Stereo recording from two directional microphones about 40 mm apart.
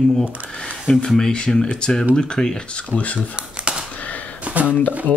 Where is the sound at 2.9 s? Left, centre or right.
Left.